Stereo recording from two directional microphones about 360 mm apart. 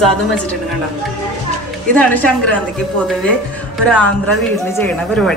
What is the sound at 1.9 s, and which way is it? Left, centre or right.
Speech, centre.